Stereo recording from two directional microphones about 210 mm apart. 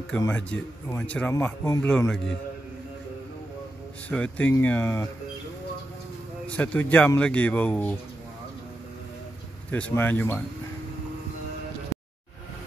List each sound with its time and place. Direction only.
0.2 s speech: 10° left (ahead or behind)
4.1 s speech: 5° left (ahead or behind)
6.4 s speech: 5° left (ahead or behind)
9.7 s speech: 5° left (ahead or behind)